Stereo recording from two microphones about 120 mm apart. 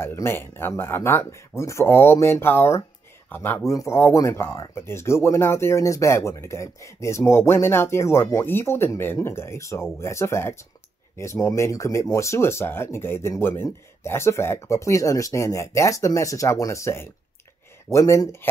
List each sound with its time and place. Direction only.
0.0 s speech: 20° left (ahead or behind)